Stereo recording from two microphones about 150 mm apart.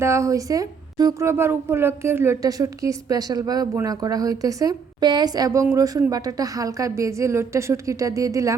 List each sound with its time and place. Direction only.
0.0 s speech: 20° right (ahead or behind)